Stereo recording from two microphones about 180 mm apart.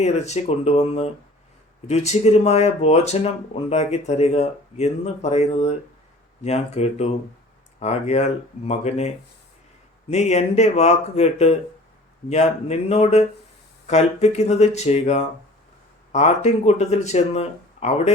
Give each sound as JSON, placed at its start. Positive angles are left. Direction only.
{"t": 0.0, "sound": "speech", "side_deg": 40}